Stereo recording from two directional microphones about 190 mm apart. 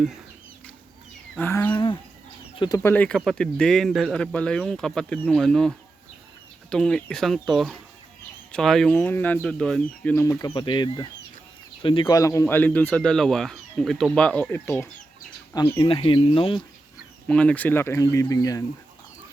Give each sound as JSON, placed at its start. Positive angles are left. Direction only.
{"t": 1.4, "sound": "speech", "side_deg": 10}
{"t": 1.7, "sound": "speech", "side_deg": 25}
{"t": 17.2, "sound": "speech", "side_deg": 5}